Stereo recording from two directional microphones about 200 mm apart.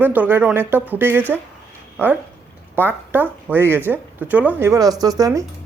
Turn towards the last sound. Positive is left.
turn(degrees=-15)  # may be behind; listen again after turning